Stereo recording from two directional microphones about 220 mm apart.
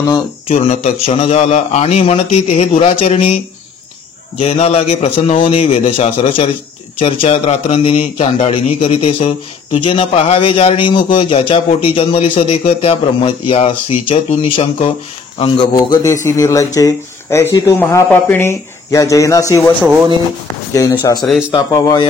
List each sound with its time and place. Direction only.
0.5 s a man's voice: 30° left (ahead or behind)
4.4 s a man's voice: 30° left (ahead or behind)
19.8 s speech: 10° right (ahead or behind)
21.2 s speech: centre (ahead or behind)
21.5 s speech: 15° left (ahead or behind)